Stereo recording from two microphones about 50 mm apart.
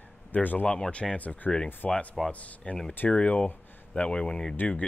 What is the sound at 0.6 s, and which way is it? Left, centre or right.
Speech, centre.